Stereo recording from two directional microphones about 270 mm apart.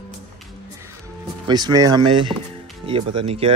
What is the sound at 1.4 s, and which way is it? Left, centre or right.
Speech, centre.